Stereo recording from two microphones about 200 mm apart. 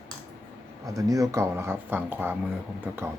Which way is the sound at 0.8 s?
15° right (ahead or behind).